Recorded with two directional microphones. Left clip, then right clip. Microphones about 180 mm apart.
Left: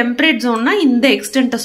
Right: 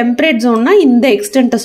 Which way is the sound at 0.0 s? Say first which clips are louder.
Right 2 dB; 45° right (ahead or behind).